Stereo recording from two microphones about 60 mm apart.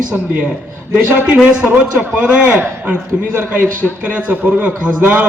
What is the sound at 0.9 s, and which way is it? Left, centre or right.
A man's voice, right.